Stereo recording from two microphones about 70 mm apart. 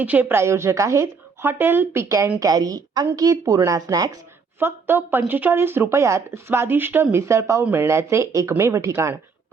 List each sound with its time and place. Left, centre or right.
0.0 s speech: right
1.5 s speech: right
2.4 s a woman's voice: right
3.2 s a woman's voice: right
4.6 s speech: right
5.9 s speech: right
7.6 s speech: right